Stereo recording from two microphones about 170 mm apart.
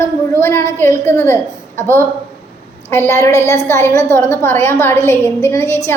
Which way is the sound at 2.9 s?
15° left (ahead or behind).